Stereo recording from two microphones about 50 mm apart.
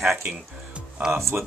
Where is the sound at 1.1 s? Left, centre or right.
Right.